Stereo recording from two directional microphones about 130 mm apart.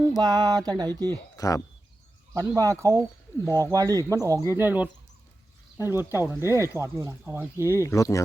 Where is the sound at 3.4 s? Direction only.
20° left (ahead or behind).